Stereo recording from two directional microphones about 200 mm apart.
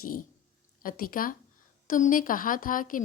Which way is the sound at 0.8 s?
45° left (ahead or behind).